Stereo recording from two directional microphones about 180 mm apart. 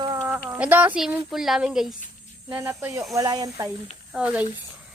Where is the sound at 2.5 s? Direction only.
15° right (ahead or behind).